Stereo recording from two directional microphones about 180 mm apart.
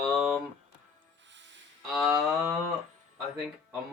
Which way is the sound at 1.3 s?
90° right.